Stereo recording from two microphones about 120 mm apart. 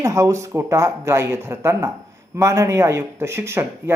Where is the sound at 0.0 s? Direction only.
25° right (ahead or behind).